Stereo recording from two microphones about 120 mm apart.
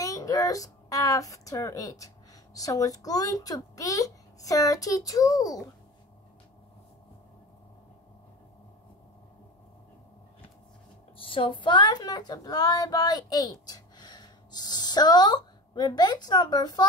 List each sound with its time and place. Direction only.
0.0 s speech: 30° left (ahead or behind)
11.1 s speech: 45° left (ahead or behind)